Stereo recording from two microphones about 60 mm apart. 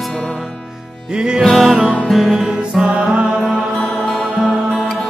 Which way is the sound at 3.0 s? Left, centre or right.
Centre.